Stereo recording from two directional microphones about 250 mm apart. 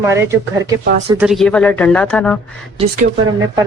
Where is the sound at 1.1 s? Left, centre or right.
Centre.